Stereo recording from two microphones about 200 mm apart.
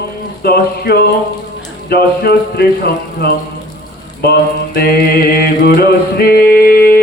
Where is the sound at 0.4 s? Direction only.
50° left (ahead or behind).